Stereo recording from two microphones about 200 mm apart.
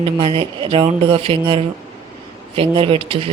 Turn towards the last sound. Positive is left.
turn(degrees=-25)  # may be behind; listen again after turning